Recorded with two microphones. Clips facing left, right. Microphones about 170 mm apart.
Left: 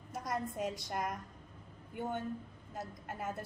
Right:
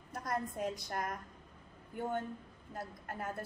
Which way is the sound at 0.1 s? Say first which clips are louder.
Even; centre (ahead or behind).